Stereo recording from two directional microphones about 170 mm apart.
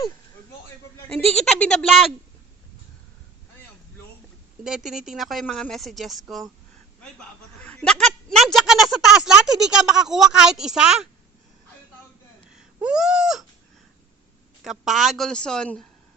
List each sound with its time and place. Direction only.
1.4 s speech: 5° left (ahead or behind)
4.6 s speech: centre (ahead or behind)
7.6 s speech: 5° left (ahead or behind)
12.5 s a sound: 5° right (ahead or behind)
14.6 s speech: centre (ahead or behind)